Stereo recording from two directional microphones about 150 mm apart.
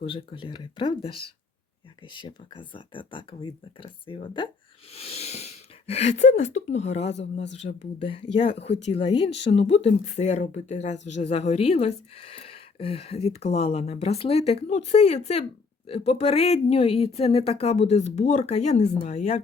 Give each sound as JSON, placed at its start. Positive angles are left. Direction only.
{"t": 0.0, "sound": "speech", "side_deg": 35}